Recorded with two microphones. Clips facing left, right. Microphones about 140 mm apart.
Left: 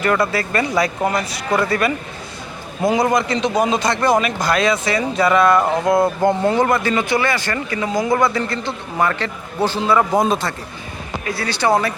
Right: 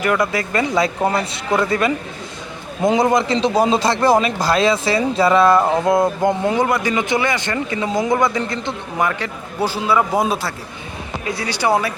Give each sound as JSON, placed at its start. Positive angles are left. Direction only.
{"t": 0.0, "sound": "speech", "side_deg": -15}
{"t": 11.3, "sound": "speech", "side_deg": -15}